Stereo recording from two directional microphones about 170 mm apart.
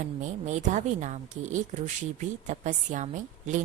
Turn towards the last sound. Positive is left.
turn(degrees=-45)  # may be behind; listen again after turning